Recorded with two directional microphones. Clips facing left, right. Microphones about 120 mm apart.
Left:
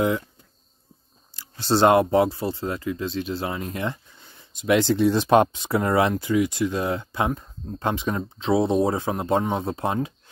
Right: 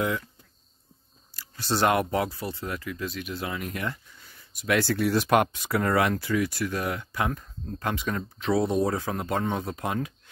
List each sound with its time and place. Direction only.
1.3 s speech: 25° left (ahead or behind)